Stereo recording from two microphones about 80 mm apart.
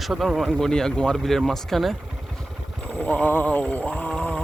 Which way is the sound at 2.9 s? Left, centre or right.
Centre.